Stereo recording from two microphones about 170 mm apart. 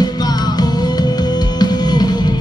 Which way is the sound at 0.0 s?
25° left (ahead or behind).